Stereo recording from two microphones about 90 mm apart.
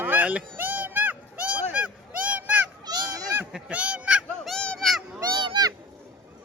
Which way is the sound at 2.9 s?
45° right (ahead or behind).